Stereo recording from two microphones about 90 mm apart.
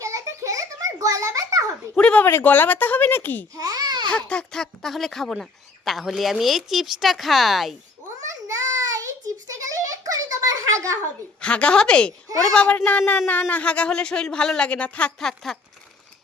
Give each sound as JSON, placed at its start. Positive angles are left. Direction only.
{"t": 0.0, "sound": "a sound", "side_deg": -35}
{"t": 2.0, "sound": "speech", "side_deg": 15}
{"t": 3.6, "sound": "babbling", "side_deg": -45}
{"t": 4.1, "sound": "speech", "side_deg": 10}
{"t": 8.9, "sound": "a sound", "side_deg": -40}
{"t": 11.3, "sound": "speech", "side_deg": 10}